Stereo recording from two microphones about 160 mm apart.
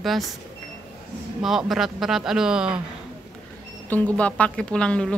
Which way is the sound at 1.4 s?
Centre (ahead or behind).